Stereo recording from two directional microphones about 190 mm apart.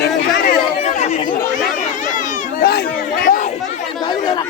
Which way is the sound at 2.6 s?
55° left (ahead or behind).